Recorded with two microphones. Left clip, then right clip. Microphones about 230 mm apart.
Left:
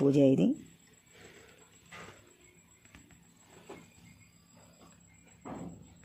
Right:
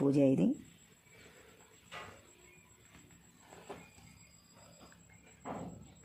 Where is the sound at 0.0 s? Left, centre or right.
Centre.